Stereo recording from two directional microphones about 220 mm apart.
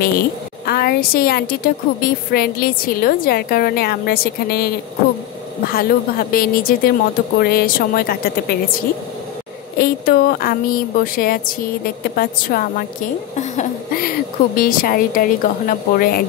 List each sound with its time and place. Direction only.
0.7 s a woman's voice: 45° left (ahead or behind)
9.8 s a woman's voice: 40° left (ahead or behind)